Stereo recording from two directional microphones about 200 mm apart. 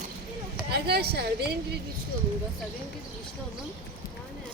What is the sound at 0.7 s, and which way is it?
Speech, 55° right (ahead or behind).